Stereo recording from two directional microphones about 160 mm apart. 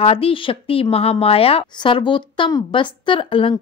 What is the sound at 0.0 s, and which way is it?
A woman's voice, 35° left (ahead or behind).